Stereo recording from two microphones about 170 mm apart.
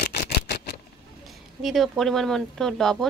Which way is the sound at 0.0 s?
65° left (ahead or behind).